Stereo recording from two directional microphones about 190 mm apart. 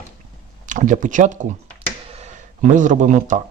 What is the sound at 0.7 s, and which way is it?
Speech, 40° right (ahead or behind).